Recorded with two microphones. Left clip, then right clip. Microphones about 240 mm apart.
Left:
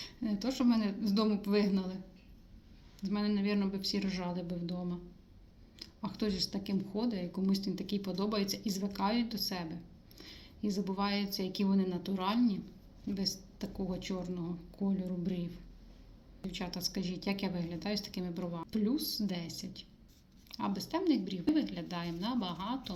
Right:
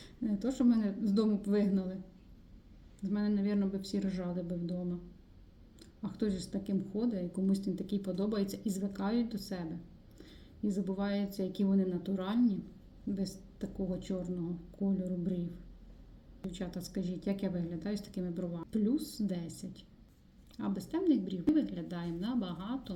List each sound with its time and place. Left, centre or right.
0.2 s speech: left
3.0 s speech: left
6.0 s speech: left
10.2 s a sound: left
11.3 s speech: left
16.5 s speech: left
20.6 s speech: left